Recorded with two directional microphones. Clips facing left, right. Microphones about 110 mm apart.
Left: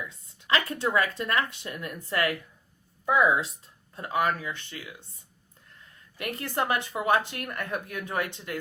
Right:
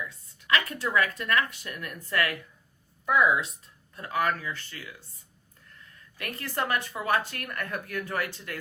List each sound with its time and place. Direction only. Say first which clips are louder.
0.0 s speech: right 1 dB; 25° left (ahead or behind)
6.1 s speech: left 2 dB; 25° left (ahead or behind)